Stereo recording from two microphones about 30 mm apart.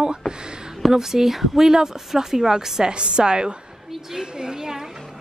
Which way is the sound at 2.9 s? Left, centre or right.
Right.